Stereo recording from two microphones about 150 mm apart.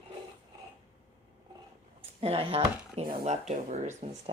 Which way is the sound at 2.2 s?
40° right (ahead or behind).